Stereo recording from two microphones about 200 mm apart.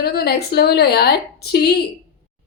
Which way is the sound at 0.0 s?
50° left (ahead or behind).